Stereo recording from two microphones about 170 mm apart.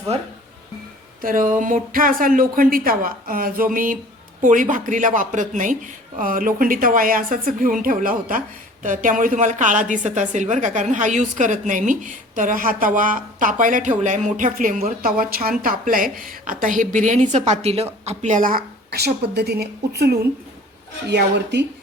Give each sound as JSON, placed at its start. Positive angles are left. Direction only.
{"t": 1.2, "sound": "a woman's voice", "side_deg": -55}
{"t": 21.1, "sound": "speech", "side_deg": -85}